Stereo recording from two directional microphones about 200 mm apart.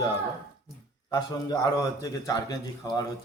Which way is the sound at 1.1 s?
20° left (ahead or behind).